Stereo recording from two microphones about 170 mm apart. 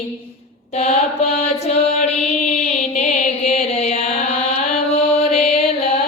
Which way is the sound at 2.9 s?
45° left (ahead or behind).